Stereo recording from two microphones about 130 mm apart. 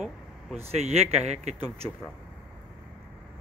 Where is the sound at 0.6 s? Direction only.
50° right (ahead or behind).